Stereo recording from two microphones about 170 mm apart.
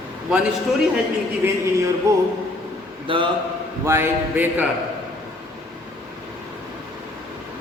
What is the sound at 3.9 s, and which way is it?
Speech, 10° right (ahead or behind).